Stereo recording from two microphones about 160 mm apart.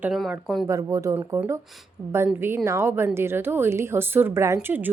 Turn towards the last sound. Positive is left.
turn(degrees=-10)  # may be behind; listen again after turning